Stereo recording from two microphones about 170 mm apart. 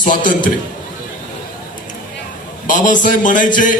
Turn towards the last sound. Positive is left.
turn(degrees=50)  # may be behind; listen again after turning